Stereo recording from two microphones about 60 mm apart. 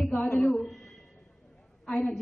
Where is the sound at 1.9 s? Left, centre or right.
Centre.